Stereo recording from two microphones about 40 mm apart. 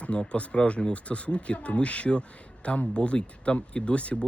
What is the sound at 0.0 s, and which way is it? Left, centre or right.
Speech, left.